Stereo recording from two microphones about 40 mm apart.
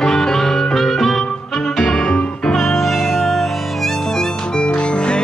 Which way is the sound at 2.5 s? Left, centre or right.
Centre.